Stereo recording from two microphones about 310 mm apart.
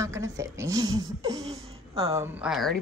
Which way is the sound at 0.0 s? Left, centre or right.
Centre.